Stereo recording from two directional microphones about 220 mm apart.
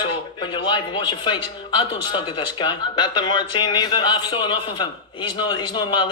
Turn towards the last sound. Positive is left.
turn(degrees=20)  # may be behind; listen again after turning